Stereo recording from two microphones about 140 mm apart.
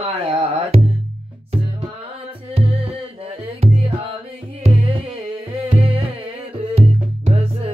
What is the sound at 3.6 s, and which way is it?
Music, 40° right (ahead or behind).